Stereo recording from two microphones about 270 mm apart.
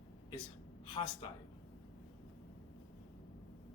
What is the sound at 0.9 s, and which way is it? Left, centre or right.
Speech, centre.